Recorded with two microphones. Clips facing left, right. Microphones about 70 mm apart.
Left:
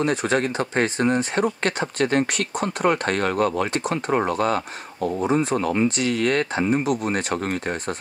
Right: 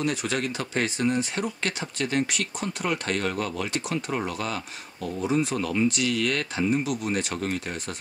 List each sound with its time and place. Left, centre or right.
0.0 s speech: left